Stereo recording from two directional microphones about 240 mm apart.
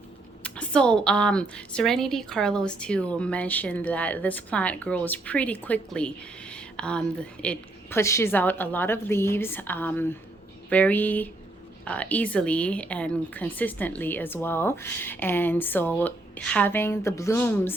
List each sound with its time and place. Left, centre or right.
0.4 s a woman's voice: centre